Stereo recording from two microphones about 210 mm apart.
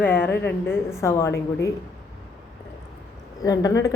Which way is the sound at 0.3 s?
50° left (ahead or behind).